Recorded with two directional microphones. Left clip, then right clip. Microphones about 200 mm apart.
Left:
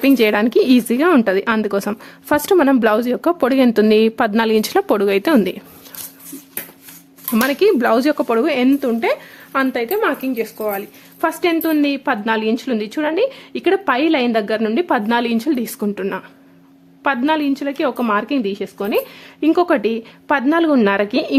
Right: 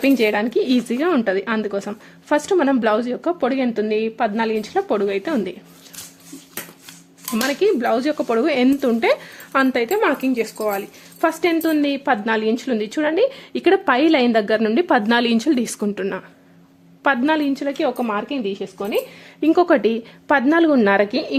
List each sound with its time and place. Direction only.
0.0 s speech: 15° left (ahead or behind); by 5.5 s 35° left (ahead or behind)
7.3 s speech: 25° left (ahead or behind); by 10.5 s 10° right (ahead or behind)
10.6 s speech: centre (ahead or behind)
17.7 s speech: 15° left (ahead or behind)
19.4 s speech: centre (ahead or behind)